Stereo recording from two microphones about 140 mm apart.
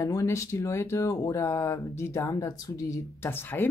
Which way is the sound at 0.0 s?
20° left (ahead or behind).